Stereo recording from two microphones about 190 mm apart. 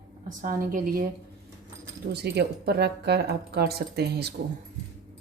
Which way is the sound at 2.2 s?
60° right (ahead or behind).